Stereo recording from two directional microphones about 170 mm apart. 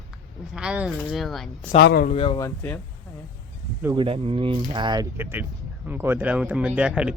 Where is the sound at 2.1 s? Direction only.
35° left (ahead or behind).